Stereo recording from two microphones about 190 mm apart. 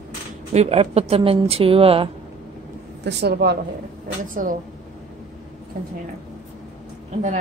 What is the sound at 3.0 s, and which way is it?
Speech, 60° right (ahead or behind).